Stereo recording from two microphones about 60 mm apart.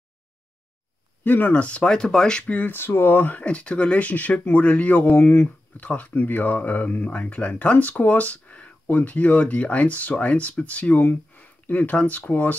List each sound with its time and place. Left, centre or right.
1.2 s speech: left; by 2.4 s centre
2.4 s speech: left
2.7 s speech: left